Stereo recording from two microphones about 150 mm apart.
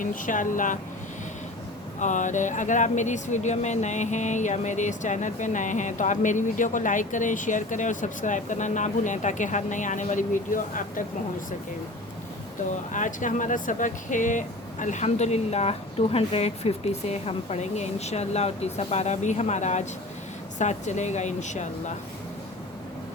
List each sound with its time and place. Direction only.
0.0 s speech: 60° left (ahead or behind)
2.0 s speech: 55° left (ahead or behind)
12.9 s speech: 60° left (ahead or behind)